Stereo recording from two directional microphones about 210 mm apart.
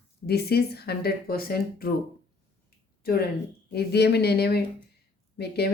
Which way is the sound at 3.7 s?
50° left (ahead or behind).